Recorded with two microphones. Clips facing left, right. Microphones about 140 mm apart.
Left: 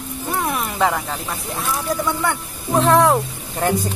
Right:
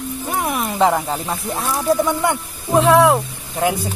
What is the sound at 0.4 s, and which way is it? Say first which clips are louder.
Music: right 3 dB; 15° right (ahead or behind).